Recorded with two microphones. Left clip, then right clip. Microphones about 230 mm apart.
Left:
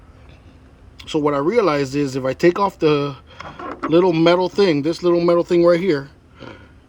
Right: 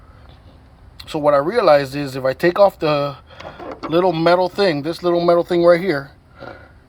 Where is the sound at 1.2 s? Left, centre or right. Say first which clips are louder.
Right 3 dB; centre.